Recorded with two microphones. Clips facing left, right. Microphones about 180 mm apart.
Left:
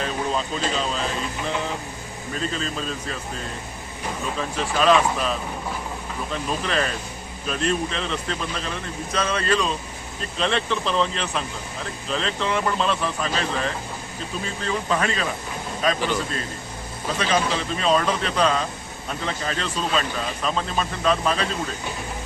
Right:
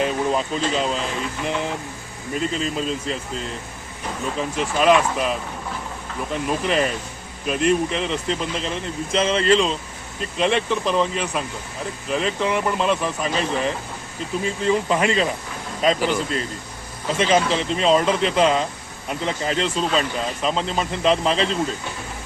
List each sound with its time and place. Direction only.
0.0 s speech: 15° right (ahead or behind)
2.3 s speech: 15° right (ahead or behind)
4.4 s speech: 20° right (ahead or behind)
17.2 s speech: 20° right (ahead or behind)